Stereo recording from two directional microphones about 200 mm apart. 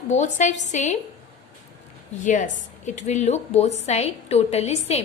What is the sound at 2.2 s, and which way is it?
A woman's voice, 40° left (ahead or behind).